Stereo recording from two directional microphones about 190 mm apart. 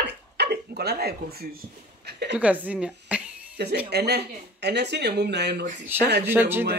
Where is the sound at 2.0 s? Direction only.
65° right (ahead or behind).